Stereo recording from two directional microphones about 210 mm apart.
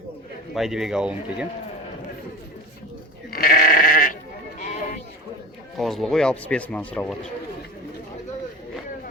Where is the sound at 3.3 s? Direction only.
45° left (ahead or behind).